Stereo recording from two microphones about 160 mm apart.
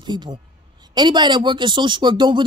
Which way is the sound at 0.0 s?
30° right (ahead or behind).